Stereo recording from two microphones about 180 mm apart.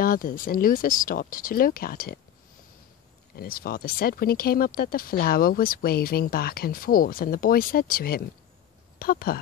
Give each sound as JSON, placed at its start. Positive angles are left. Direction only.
{"t": 0.0, "sound": "speech", "side_deg": 50}
{"t": 3.3, "sound": "speech", "side_deg": 55}